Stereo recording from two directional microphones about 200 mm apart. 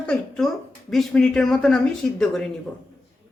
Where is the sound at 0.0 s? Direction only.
5° left (ahead or behind).